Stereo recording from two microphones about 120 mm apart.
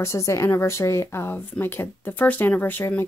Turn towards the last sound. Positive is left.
turn(degrees=15)  # may be behind; listen again after turning